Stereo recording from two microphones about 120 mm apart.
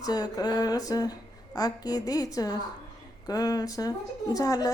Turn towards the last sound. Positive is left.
turn(degrees=30)  # may be behind; listen again after turning